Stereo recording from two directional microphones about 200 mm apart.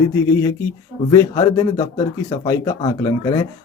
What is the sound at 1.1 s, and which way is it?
Speech, 20° left (ahead or behind).